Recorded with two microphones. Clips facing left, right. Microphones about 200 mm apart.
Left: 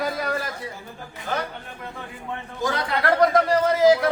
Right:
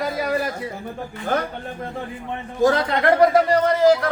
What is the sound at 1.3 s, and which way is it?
Speech, 55° right (ahead or behind).